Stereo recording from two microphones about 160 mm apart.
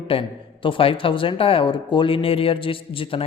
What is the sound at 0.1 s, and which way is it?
Speech, 35° left (ahead or behind).